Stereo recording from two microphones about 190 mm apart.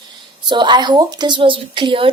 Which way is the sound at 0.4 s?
25° right (ahead or behind).